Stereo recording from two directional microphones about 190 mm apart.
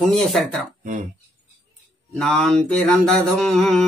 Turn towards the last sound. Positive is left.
turn(degrees=5)  # may be behind; listen again after turning